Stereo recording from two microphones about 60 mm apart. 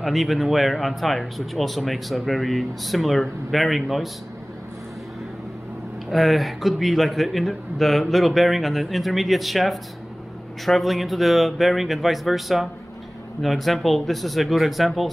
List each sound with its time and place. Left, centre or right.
0.0 s speech: centre
6.0 s speech: centre